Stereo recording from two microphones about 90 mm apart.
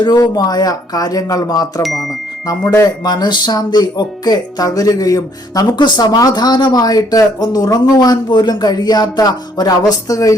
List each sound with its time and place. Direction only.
0.0 s speech: 45° left (ahead or behind)
3.0 s speech: 50° left (ahead or behind)
5.7 s speech: 55° left (ahead or behind)